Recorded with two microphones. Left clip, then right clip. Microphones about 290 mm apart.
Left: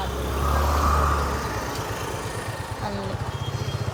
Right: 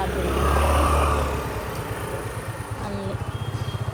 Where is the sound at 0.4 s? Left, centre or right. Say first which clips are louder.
Right 1 dB; right.